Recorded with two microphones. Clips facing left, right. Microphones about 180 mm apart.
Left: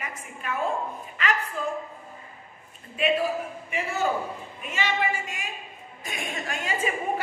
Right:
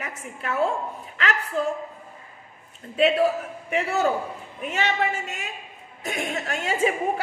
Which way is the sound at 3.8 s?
70° right (ahead or behind).